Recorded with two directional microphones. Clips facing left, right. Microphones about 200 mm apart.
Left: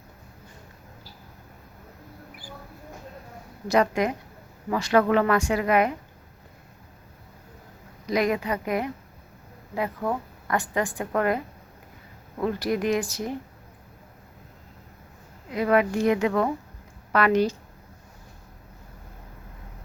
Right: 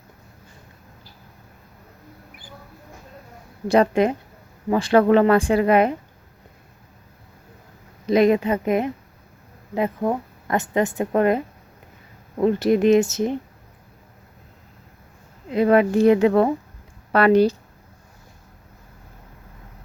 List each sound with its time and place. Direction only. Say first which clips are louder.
3.7 s a woman's voice: right 5 dB; 30° right (ahead or behind)
8.0 s a woman's voice: right 8 dB; 25° right (ahead or behind)
15.4 s speech: right 5 dB; 25° right (ahead or behind)